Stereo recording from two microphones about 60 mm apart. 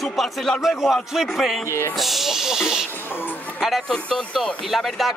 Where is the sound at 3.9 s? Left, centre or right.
Centre.